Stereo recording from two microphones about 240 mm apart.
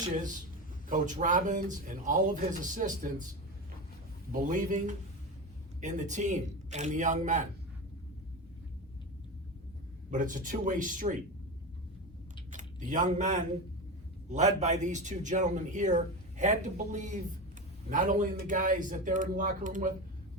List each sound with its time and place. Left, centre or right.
0.9 s a man's voice: right
4.3 s a man's voice: right
10.1 s a man's voice: right
12.5 s a sound: right
14.3 s a man's voice: right